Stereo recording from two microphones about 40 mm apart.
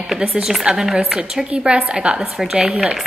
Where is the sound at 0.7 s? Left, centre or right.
Centre.